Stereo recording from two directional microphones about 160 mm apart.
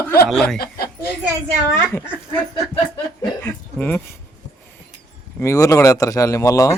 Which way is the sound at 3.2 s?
10° left (ahead or behind).